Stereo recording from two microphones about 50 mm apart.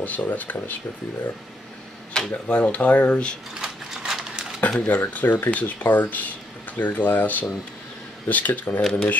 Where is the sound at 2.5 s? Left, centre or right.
Left.